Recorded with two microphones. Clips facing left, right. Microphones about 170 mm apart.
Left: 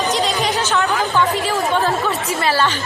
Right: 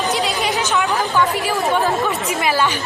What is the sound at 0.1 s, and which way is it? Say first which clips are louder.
Chatter: left 1 dB; 40° left (ahead or behind).